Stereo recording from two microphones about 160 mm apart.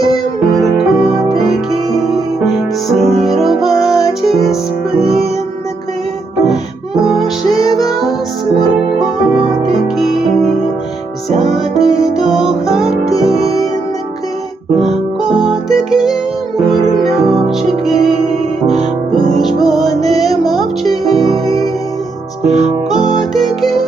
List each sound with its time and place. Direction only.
0.8 s music: 5° right (ahead or behind)
7.0 s music: centre (ahead or behind)
9.8 s music: centre (ahead or behind)
11.5 s music: 5° right (ahead or behind)
13.3 s music: 40° right (ahead or behind)
15.3 s music: 5° right (ahead or behind)
18.6 s music: 40° right (ahead or behind)
19.2 s music: centre (ahead or behind)
22.4 s music: 45° right (ahead or behind)
22.9 s music: centre (ahead or behind)